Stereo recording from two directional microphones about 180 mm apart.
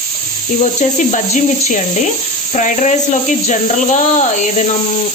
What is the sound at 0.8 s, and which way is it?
Speech, 45° left (ahead or behind).